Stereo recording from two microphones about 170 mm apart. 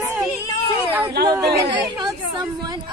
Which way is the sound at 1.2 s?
70° right (ahead or behind).